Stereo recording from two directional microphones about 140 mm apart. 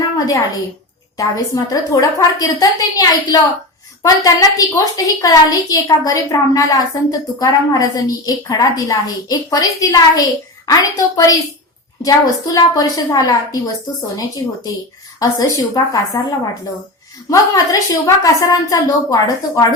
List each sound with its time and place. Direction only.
1.1 s a woman's voice: 25° left (ahead or behind)
17.2 s a woman's voice: 25° left (ahead or behind)